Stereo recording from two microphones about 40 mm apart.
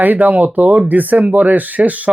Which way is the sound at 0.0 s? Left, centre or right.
Right.